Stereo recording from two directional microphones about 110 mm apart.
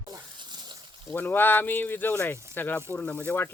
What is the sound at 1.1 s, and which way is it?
Speech, 20° left (ahead or behind).